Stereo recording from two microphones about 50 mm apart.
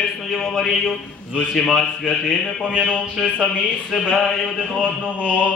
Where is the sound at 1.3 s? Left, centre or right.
Centre.